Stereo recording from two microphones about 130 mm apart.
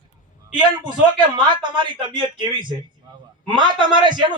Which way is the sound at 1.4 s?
40° right (ahead or behind).